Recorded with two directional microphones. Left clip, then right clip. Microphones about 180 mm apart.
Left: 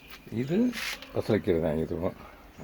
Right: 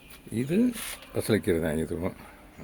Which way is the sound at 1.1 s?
25° right (ahead or behind).